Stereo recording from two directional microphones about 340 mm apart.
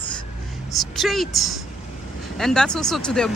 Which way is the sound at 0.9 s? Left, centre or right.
Centre.